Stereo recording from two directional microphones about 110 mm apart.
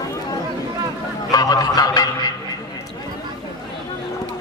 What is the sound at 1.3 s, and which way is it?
Speech, 35° left (ahead or behind).